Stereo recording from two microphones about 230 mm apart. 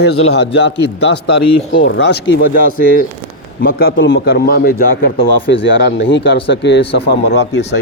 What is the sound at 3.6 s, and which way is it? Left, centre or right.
Speech, left.